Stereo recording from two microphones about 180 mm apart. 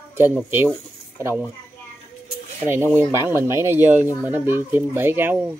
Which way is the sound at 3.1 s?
15° right (ahead or behind).